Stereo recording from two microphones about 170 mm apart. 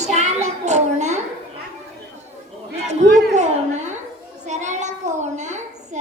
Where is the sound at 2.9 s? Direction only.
45° right (ahead or behind).